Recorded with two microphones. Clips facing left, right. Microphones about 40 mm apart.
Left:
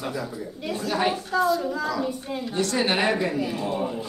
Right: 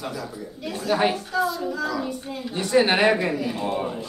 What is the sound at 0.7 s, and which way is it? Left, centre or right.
Speech, centre.